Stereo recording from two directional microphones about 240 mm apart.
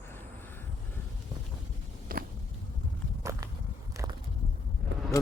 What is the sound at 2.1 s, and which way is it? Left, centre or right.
Biting, right.